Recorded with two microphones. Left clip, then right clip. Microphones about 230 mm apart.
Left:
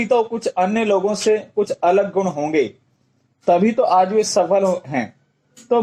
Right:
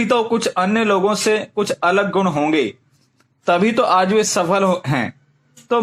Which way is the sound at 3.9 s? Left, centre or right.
Centre.